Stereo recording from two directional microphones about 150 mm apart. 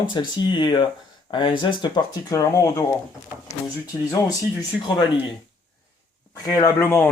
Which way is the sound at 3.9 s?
25° left (ahead or behind).